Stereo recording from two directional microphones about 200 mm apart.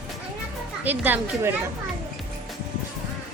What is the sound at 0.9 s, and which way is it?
Speech, 10° right (ahead or behind).